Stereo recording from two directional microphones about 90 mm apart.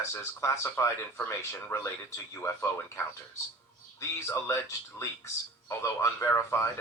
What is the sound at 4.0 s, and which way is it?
Speech, 30° left (ahead or behind).